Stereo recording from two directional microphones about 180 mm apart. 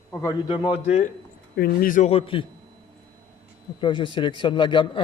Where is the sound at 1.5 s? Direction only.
55° left (ahead or behind); by 2.4 s 30° left (ahead or behind).